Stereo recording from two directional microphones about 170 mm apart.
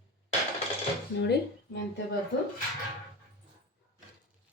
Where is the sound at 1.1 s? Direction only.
85° left.